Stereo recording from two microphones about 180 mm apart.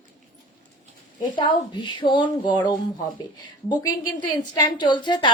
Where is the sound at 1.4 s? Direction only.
25° left (ahead or behind).